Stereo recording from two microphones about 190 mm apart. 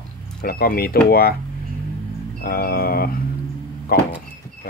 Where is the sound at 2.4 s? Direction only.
55° left (ahead or behind).